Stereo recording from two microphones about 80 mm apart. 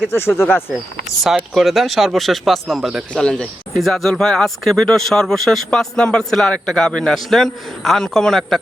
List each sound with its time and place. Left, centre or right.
0.1 s speech: left
1.5 s speech: centre
3.1 s speech: centre